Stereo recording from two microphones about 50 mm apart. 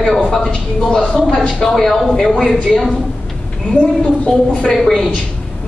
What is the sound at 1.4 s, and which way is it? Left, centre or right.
A woman's voice, centre.